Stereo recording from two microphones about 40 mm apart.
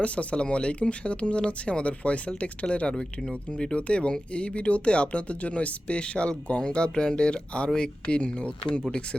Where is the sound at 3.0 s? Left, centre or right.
Centre.